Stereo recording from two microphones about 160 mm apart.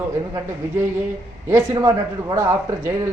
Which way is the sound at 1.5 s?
20° right (ahead or behind).